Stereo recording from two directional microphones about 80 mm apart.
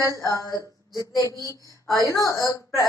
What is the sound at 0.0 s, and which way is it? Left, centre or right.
A woman's voice, left.